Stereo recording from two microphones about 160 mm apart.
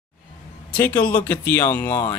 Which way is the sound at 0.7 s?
10° left (ahead or behind).